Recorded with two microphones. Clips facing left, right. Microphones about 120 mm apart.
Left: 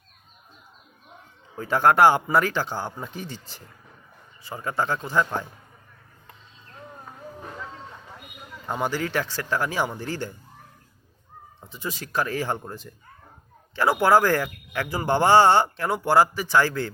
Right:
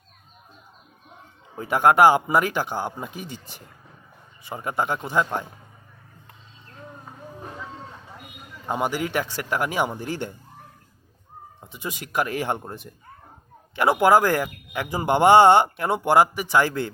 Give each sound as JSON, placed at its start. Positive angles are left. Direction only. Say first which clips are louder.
{"t": 1.5, "sound": "a man's voice", "louder": "right 1 dB", "side_deg": -15}
{"t": 8.6, "sound": "a man's voice", "louder": "right 1 dB", "side_deg": -15}
{"t": 11.6, "sound": "speech", "louder": "even", "side_deg": -20}